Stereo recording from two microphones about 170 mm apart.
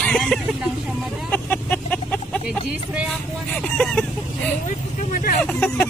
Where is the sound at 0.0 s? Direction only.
5° left (ahead or behind).